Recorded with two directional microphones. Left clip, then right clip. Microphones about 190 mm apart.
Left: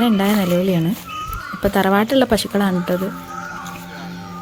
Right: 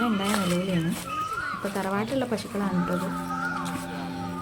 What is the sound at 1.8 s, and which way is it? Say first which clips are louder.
Speech: left 14 dB; 45° left (ahead or behind).